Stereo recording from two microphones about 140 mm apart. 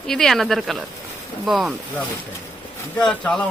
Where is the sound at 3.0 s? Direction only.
5° left (ahead or behind).